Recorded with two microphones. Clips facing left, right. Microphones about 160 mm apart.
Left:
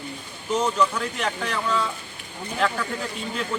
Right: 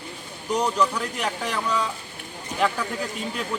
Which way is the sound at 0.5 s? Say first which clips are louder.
Even; 10° right (ahead or behind).